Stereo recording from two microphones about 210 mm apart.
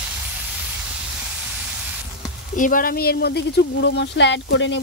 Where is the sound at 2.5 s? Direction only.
40° left (ahead or behind).